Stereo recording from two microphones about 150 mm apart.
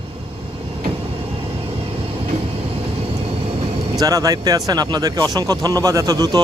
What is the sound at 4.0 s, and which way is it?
Speech, 25° right (ahead or behind).